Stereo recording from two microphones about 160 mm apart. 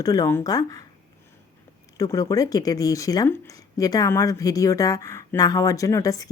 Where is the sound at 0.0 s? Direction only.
20° left (ahead or behind).